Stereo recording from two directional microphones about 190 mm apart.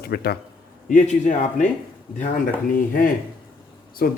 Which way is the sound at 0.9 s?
40° left (ahead or behind).